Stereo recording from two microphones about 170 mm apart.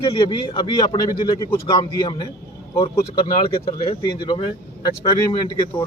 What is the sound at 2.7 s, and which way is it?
Speech, 25° left (ahead or behind).